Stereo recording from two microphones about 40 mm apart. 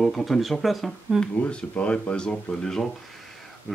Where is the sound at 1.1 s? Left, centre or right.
Centre.